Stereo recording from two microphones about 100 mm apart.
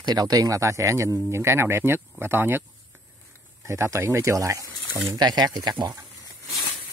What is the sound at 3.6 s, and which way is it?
Speech, 30° right (ahead or behind).